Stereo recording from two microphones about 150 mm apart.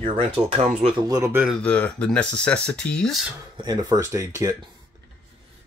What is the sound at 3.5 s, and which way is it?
Speech, 25° right (ahead or behind).